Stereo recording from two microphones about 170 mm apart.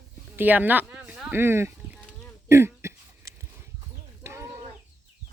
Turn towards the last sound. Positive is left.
turn(degrees=-15)  # may be behind; listen again after turning